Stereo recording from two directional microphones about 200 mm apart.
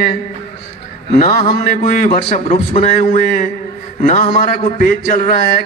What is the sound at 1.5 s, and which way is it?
A man's voice, 45° left (ahead or behind).